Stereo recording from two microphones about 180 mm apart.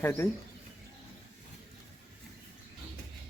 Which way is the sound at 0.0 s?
15° left (ahead or behind).